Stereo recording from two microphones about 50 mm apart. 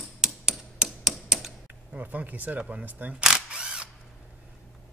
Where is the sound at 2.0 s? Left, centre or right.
Right.